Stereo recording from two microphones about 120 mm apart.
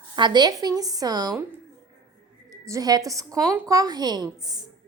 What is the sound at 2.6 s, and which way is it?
A woman's voice, 30° right (ahead or behind).